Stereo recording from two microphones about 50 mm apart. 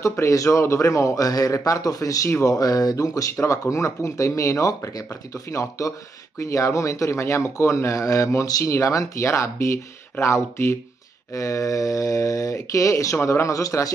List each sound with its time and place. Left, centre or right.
0.0 s speech: left
11.3 s speech: left